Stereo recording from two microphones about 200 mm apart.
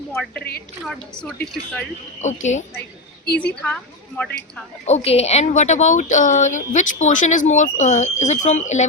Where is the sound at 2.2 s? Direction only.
35° left (ahead or behind).